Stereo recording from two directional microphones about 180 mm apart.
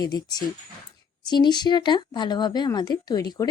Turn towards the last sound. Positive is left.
turn(degrees=20)  # may be behind; listen again after turning